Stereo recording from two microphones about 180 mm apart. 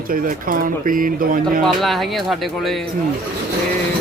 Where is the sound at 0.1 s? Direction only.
50° right (ahead or behind).